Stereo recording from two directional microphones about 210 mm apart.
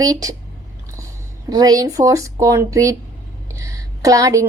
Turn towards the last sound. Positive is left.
turn(degrees=-15)  # may be behind; listen again after turning